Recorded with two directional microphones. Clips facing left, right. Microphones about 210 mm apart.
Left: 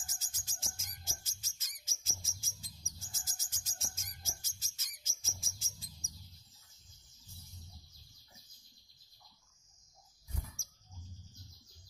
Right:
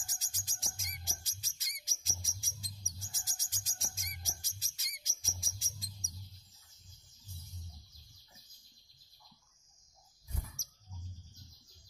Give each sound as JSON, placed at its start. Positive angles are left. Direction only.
{"t": 0.0, "sound": "bird", "side_deg": -15}